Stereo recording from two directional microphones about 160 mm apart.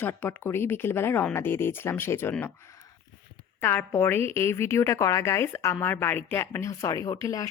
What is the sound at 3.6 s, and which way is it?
Speech, 10° left (ahead or behind).